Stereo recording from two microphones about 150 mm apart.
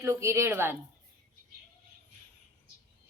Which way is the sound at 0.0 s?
20° right (ahead or behind).